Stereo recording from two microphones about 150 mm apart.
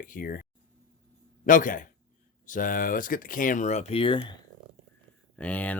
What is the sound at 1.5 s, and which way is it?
Speech, 60° left (ahead or behind).